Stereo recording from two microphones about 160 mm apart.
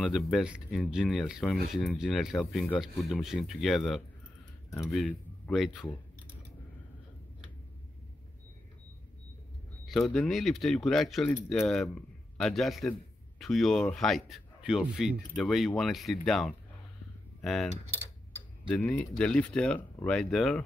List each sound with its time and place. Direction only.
0.0 s speech: centre (ahead or behind)
4.6 s speech: 20° left (ahead or behind)
4.9 s a man's voice: centre (ahead or behind)
9.8 s speech: centre (ahead or behind)
17.4 s keys jangling: centre (ahead or behind)
18.7 s speech: 10° left (ahead or behind)